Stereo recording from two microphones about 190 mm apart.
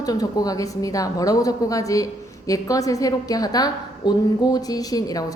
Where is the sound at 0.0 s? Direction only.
20° left (ahead or behind).